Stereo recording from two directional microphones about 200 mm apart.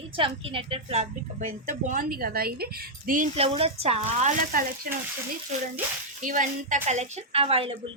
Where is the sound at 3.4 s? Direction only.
30° right (ahead or behind).